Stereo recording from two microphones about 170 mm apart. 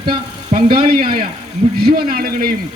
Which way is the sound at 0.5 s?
40° right (ahead or behind).